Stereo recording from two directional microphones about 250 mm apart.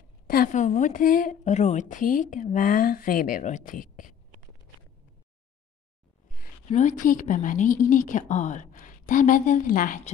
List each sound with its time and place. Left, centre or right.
0.3 s a woman's voice: left
6.3 s a woman's voice: left